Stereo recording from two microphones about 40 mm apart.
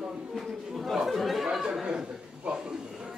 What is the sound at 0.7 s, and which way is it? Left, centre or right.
Chatter, centre.